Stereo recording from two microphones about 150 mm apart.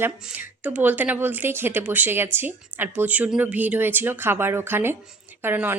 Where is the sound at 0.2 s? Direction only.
10° right (ahead or behind).